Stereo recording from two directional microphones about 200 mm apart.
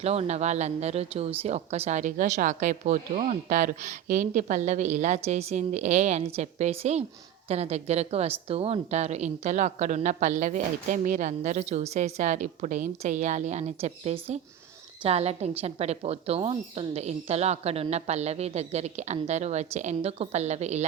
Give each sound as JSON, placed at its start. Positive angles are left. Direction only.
{"t": 0.0, "sound": "speech", "side_deg": -30}